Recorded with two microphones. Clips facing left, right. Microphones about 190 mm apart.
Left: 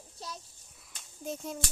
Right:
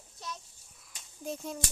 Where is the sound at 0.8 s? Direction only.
Centre (ahead or behind).